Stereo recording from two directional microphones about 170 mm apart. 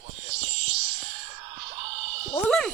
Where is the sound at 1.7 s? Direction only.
30° right (ahead or behind).